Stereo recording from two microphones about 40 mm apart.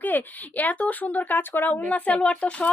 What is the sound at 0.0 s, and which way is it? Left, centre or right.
Speech, left.